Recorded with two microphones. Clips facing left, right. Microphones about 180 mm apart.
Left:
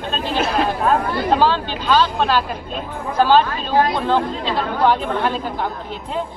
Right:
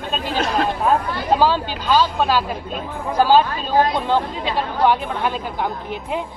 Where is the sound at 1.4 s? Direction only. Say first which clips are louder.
Even; 10° right (ahead or behind).